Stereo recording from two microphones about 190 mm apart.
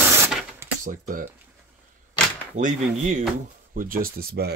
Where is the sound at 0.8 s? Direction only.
45° right (ahead or behind).